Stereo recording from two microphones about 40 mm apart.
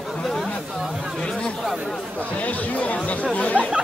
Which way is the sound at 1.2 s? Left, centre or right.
Centre.